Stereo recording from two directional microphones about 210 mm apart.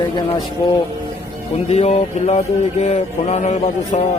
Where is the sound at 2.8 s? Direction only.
30° left (ahead or behind).